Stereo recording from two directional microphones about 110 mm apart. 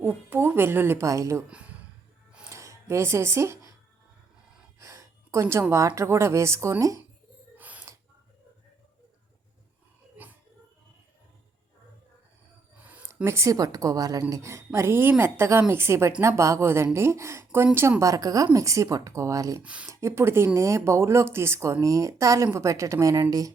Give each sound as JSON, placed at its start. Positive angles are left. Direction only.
{"t": 0.0, "sound": "a woman's voice", "side_deg": -20}
{"t": 1.5, "sound": "speech", "side_deg": -10}
{"t": 2.5, "sound": "a sound", "side_deg": -25}
{"t": 4.8, "sound": "a woman's voice", "side_deg": -25}
{"t": 7.6, "sound": "a sound", "side_deg": -15}
{"t": 12.7, "sound": "a sound", "side_deg": -15}
{"t": 13.2, "sound": "a woman's voice", "side_deg": -25}
{"t": 19.6, "sound": "speech", "side_deg": -10}
{"t": 19.9, "sound": "a woman's voice", "side_deg": -25}